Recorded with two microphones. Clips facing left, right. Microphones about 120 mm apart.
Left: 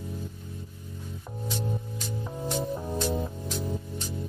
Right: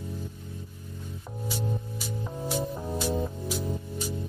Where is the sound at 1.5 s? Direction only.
5° right (ahead or behind).